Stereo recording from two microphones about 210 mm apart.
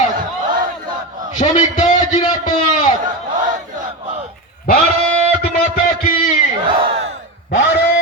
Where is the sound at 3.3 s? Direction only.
40° right (ahead or behind).